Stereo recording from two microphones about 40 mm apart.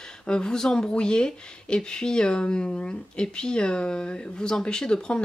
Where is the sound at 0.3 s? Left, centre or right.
Centre.